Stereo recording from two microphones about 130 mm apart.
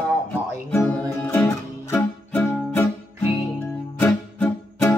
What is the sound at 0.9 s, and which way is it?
Music, 10° left (ahead or behind).